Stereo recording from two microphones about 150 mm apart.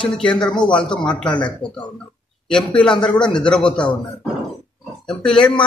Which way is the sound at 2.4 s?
5° left (ahead or behind).